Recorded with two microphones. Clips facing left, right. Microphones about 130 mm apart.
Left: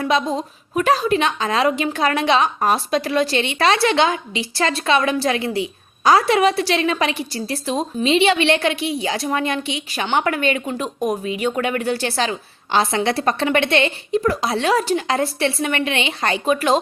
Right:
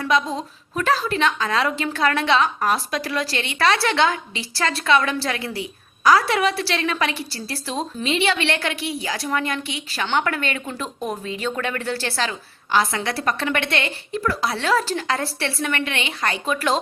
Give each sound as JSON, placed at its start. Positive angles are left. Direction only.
{"t": 0.0, "sound": "a woman's voice", "side_deg": 20}